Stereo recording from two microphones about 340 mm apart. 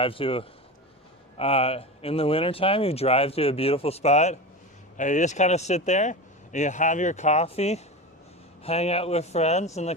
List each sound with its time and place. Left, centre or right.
0.0 s speech: centre